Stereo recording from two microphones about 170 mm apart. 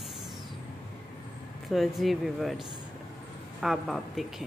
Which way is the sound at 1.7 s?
Centre (ahead or behind).